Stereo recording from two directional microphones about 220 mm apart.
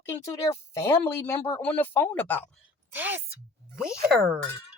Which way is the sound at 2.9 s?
10° right (ahead or behind).